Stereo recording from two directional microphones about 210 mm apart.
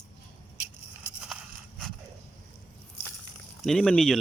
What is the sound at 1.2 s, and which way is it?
Crushing, 5° right (ahead or behind).